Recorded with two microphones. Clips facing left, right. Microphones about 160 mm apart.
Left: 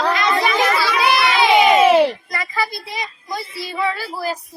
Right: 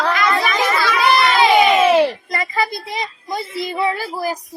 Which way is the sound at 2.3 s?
20° right (ahead or behind).